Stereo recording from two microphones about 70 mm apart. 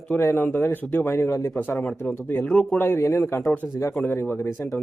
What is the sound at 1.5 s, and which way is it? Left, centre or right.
Speech, left.